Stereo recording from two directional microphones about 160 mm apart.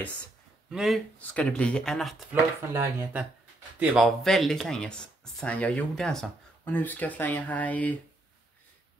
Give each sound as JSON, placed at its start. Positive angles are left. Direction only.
{"t": 0.7, "sound": "speech", "side_deg": 0}
{"t": 2.7, "sound": "speech", "side_deg": -15}
{"t": 4.2, "sound": "speech", "side_deg": 0}